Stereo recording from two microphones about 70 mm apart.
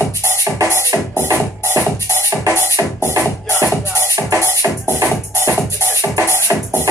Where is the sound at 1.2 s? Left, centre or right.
Right.